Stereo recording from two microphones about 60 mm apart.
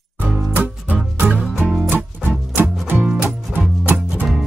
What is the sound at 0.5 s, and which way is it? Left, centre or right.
Music, right.